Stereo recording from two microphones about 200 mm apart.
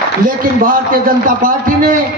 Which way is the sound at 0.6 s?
45° right (ahead or behind).